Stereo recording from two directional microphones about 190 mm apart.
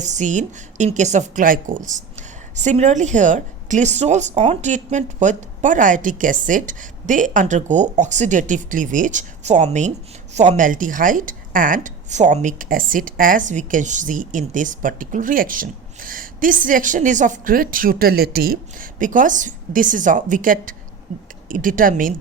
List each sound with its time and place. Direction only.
0.0 s a woman's voice: 40° right (ahead or behind)